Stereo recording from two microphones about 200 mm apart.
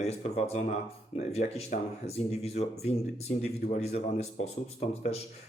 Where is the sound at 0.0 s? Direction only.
30° left (ahead or behind).